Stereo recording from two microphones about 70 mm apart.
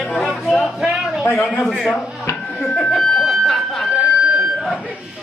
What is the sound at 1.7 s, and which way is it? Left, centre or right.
Speech, centre.